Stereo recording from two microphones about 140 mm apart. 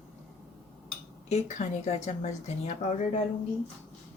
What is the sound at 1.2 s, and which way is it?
A woman's voice, 55° left (ahead or behind).